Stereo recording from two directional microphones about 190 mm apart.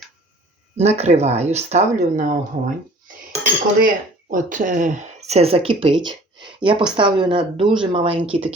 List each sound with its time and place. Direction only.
0.8 s speech: 35° right (ahead or behind)
3.4 s speech: 45° right (ahead or behind); by 8.4 s 30° right (ahead or behind)